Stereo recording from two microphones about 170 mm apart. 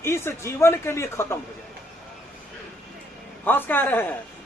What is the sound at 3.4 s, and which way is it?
Speech, 10° left (ahead or behind).